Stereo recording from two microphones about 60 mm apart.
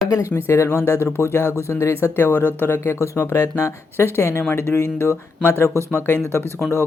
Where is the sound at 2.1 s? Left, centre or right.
Left.